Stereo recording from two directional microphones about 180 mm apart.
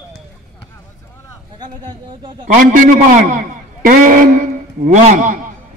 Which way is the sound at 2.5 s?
50° right (ahead or behind).